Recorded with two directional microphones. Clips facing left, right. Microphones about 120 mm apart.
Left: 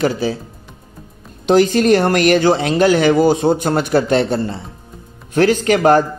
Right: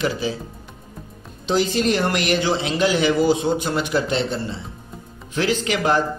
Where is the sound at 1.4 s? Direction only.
55° left (ahead or behind).